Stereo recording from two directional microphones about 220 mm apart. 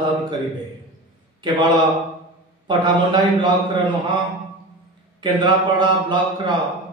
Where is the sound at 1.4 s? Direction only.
20° right (ahead or behind).